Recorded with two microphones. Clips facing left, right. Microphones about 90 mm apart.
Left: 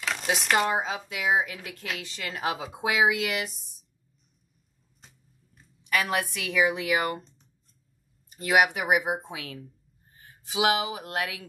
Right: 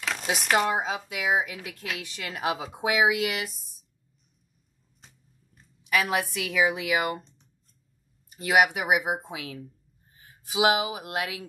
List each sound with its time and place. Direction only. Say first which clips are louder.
0.0 s speech: left 1 dB; centre (ahead or behind)
5.0 s a sound: even; centre (ahead or behind)
8.4 s speech: right 1 dB; centre (ahead or behind)
10.1 s speech: right 1 dB; 35° left (ahead or behind)